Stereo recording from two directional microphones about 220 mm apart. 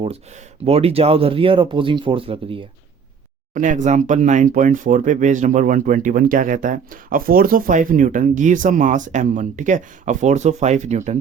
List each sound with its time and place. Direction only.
0.6 s speech: 25° right (ahead or behind)
3.5 s speech: 35° right (ahead or behind)